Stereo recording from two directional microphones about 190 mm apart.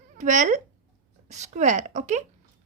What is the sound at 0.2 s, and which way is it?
A woman's voice, 40° right (ahead or behind).